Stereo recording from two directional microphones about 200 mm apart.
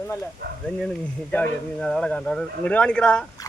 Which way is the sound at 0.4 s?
50° right (ahead or behind).